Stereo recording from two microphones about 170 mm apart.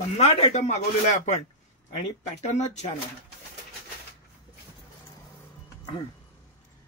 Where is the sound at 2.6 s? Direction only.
40° left (ahead or behind).